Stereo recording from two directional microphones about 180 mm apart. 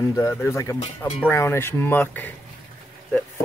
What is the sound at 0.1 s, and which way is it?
Speech, 15° left (ahead or behind).